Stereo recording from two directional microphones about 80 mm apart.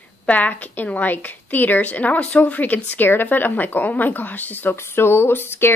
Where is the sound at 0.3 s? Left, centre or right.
Centre.